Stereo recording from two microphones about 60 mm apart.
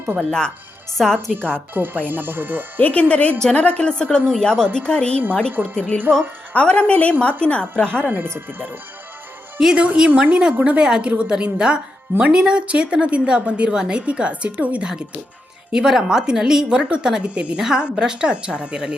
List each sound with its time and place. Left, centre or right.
0.3 s a woman's voice: centre
1.1 s speech: right
2.8 s a woman's voice: left
5.5 s speech: right
5.7 s a woman's voice: centre
8.1 s speech: right
9.6 s a woman's voice: centre
9.8 s a woman's voice: right
10.1 s speech: right
10.6 s a woman's voice: centre
15.7 s a woman's voice: centre